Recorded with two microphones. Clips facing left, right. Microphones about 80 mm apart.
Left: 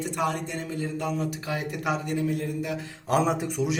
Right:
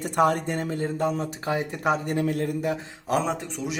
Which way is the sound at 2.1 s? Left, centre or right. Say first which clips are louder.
Right 2 dB; right.